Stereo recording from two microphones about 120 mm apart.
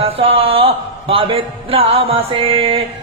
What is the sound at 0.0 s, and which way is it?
Speech, 50° right (ahead or behind).